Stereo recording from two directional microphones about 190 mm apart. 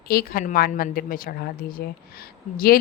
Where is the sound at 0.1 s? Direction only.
50° left (ahead or behind).